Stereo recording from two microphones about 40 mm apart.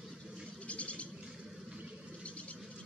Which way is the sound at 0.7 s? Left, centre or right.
Left.